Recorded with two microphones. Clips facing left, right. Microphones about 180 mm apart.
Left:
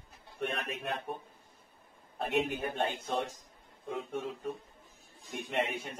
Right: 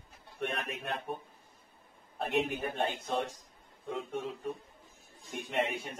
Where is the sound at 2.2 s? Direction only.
Centre (ahead or behind).